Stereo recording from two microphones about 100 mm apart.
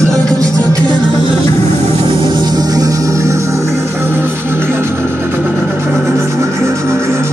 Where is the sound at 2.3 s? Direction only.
45° right (ahead or behind); by 7.3 s 30° right (ahead or behind).